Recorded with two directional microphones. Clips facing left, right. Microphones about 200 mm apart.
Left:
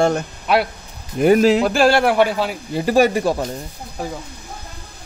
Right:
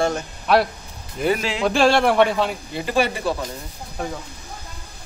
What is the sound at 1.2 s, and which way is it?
Speech, 45° left (ahead or behind).